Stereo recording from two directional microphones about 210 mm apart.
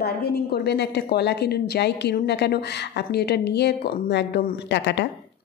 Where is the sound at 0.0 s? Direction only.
50° left (ahead or behind).